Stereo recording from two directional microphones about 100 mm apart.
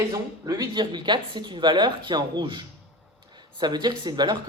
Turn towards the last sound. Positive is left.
turn(degrees=-45)  # may be behind; listen again after turning